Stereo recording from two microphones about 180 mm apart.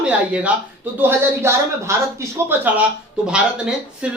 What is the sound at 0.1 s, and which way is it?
Speech, 5° right (ahead or behind).